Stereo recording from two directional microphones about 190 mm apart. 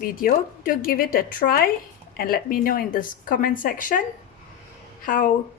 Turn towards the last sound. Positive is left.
turn(degrees=45)  # may be behind; listen again after turning